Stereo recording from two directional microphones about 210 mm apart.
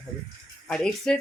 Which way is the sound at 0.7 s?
5° left (ahead or behind).